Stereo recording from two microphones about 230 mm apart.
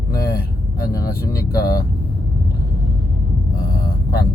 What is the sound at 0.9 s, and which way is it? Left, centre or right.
Speech, centre.